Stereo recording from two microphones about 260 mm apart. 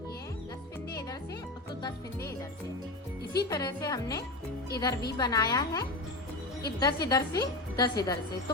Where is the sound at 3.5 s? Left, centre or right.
Centre.